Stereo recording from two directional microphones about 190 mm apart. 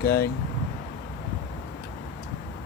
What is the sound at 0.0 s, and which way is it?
Speech, 55° left (ahead or behind).